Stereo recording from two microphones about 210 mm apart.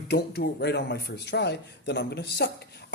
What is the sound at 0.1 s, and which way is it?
Speech, 50° left (ahead or behind).